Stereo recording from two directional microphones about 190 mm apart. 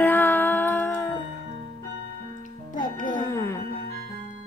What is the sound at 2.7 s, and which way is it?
Music, 45° left (ahead or behind).